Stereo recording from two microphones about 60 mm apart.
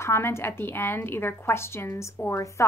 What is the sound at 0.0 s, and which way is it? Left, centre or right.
A woman's voice, left.